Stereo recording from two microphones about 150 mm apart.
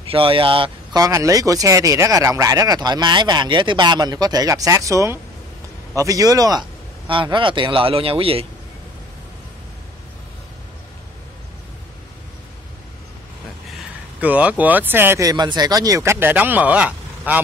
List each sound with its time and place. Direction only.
0.1 s a man's voice: 35° right (ahead or behind)
14.2 s speech: 10° right (ahead or behind)